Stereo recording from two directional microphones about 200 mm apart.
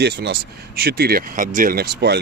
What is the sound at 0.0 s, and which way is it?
Speech, 55° right (ahead or behind).